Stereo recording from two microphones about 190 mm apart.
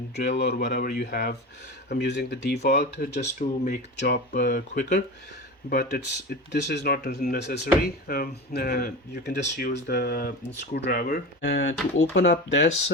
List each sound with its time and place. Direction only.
0.3 s speech: 65° left (ahead or behind)
3.2 s speech: 45° left (ahead or behind)
5.6 s speech: 55° left (ahead or behind)